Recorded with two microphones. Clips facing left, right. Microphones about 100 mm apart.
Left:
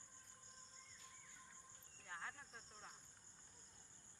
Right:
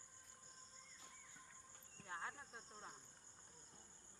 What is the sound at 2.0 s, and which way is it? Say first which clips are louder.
Cricket: right 3 dB; 25° right (ahead or behind).